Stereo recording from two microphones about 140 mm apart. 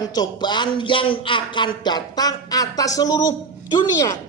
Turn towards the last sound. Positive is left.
turn(degrees=30)  # may be behind; listen again after turning